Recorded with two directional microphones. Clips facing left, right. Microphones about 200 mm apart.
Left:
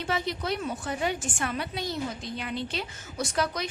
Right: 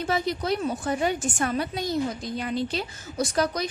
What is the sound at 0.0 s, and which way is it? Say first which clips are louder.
A woman's voice: right 4 dB; 40° right (ahead or behind).